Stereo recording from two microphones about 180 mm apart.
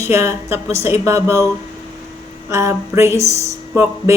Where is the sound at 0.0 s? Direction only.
15° right (ahead or behind).